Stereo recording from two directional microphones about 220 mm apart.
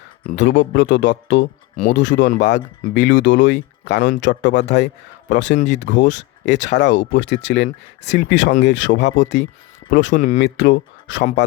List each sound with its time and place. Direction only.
0.3 s speech: 55° left (ahead or behind)
10.2 s speech: 35° left (ahead or behind)
10.4 s speech: 55° left (ahead or behind)